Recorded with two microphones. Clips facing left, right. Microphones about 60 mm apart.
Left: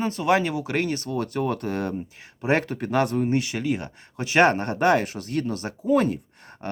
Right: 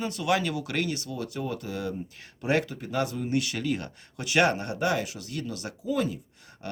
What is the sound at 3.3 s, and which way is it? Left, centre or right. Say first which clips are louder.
Speech: left 4 dB; left.